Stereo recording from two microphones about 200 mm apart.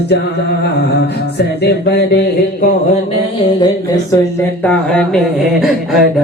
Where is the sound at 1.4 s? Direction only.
55° left (ahead or behind).